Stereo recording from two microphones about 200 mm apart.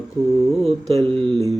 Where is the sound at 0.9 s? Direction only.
25° right (ahead or behind).